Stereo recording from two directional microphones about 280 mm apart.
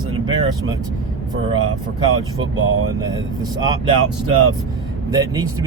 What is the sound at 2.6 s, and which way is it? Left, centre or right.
Speech, right.